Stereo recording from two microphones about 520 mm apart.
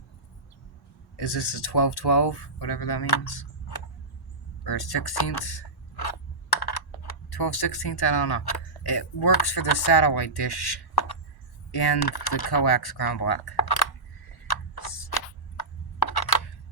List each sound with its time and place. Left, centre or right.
1.1 s speech: left
4.6 s speech: left
7.3 s speech: left
14.5 s a sound: left